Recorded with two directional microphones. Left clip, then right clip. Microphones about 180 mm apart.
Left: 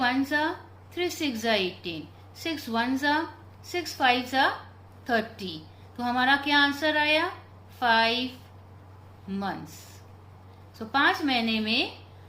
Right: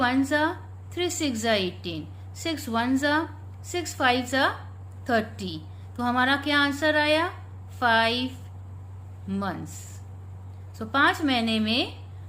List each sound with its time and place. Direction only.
0.0 s a woman's voice: 35° right (ahead or behind)
9.3 s a woman's voice: 35° right (ahead or behind)